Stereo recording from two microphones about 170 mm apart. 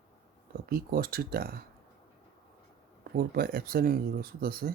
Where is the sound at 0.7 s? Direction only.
65° right (ahead or behind).